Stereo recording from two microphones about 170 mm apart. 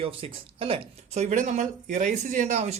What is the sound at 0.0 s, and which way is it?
Speech, 35° right (ahead or behind).